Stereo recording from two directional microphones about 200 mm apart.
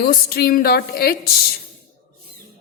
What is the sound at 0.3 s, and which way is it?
Speech, 50° left (ahead or behind).